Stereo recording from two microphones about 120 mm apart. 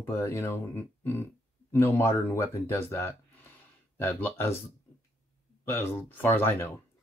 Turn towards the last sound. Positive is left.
turn(degrees=20)  # may be behind; listen again after turning